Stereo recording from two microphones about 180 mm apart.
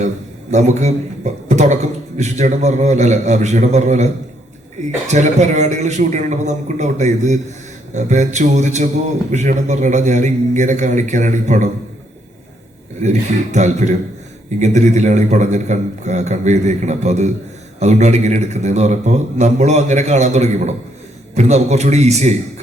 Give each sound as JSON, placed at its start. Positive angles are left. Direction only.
{"t": 0.5, "sound": "a man's voice", "side_deg": -40}
{"t": 13.0, "sound": "a man's voice", "side_deg": -40}